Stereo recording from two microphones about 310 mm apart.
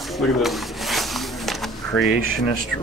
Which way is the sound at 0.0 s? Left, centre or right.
Centre.